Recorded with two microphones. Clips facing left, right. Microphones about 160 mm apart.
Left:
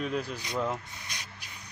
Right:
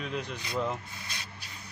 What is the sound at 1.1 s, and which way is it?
Spray, 15° left (ahead or behind).